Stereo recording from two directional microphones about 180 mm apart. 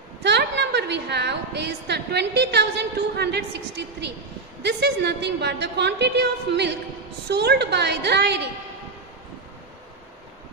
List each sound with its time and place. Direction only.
0.2 s a woman's voice: 70° right (ahead or behind)